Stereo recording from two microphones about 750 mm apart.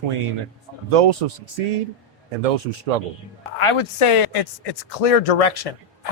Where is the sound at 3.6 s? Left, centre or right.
Left.